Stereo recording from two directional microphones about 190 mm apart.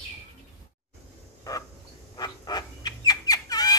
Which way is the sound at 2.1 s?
20° left (ahead or behind).